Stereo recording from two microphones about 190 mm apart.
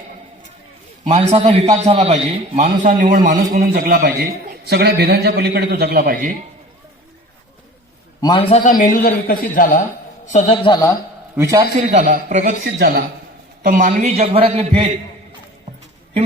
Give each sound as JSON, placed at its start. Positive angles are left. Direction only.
{"t": 1.0, "sound": "a man's voice", "side_deg": -30}
{"t": 8.2, "sound": "a man's voice", "side_deg": 25}
{"t": 10.5, "sound": "a man's voice", "side_deg": 25}
{"t": 11.3, "sound": "a man's voice", "side_deg": -15}
{"t": 11.9, "sound": "a man's voice", "side_deg": -40}